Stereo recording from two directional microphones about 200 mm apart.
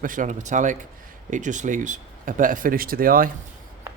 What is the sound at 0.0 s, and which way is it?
Speech, 40° right (ahead or behind).